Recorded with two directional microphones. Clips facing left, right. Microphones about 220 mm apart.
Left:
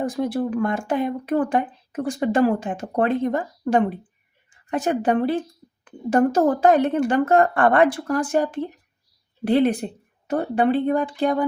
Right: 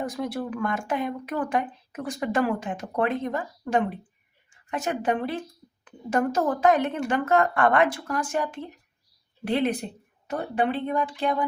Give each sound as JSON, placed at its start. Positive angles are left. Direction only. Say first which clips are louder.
{"t": 0.0, "sound": "speech", "louder": "left 6 dB", "side_deg": 30}
{"t": 4.7, "sound": "speech", "louder": "left 6 dB", "side_deg": 35}